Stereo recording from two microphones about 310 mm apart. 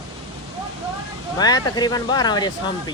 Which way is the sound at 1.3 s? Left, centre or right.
Centre.